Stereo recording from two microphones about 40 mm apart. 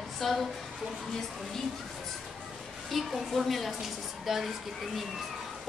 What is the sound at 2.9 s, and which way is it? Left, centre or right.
A woman's voice, centre.